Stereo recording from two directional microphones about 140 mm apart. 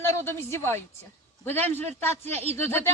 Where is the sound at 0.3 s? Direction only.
20° left (ahead or behind).